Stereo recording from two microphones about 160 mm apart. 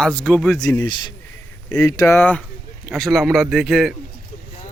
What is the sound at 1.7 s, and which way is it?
Speech, 20° left (ahead or behind).